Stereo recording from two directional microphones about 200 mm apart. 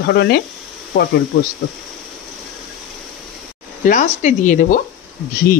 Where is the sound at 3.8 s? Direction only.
40° left (ahead or behind).